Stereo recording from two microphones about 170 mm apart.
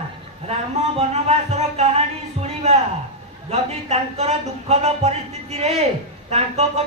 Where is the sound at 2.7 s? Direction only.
40° right (ahead or behind).